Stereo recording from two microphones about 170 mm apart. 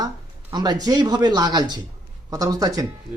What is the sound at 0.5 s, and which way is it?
Speech, 25° right (ahead or behind).